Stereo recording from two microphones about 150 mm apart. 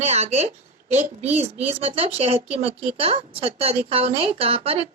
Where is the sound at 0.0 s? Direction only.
45° right (ahead or behind).